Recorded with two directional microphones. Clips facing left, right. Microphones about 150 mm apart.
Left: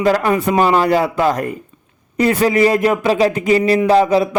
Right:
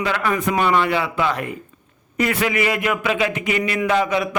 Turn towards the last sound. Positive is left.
turn(degrees=35)  # may be behind; listen again after turning